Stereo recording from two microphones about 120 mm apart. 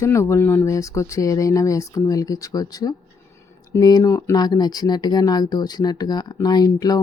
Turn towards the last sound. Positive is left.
turn(degrees=30)  # may be behind; listen again after turning